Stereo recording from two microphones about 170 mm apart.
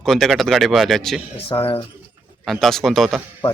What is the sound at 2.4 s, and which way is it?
Speech, centre (ahead or behind).